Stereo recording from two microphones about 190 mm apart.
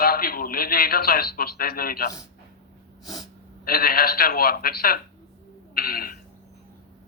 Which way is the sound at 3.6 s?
50° left (ahead or behind).